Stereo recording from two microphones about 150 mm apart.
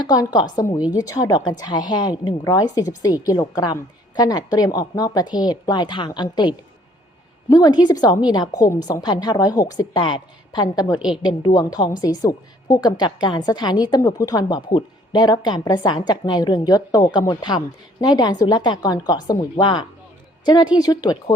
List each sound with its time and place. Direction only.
0.0 s a woman's voice: 25° left (ahead or behind)
7.5 s a woman's voice: 30° left (ahead or behind)